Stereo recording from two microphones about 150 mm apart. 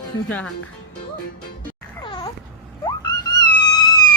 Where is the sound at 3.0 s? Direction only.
25° left (ahead or behind).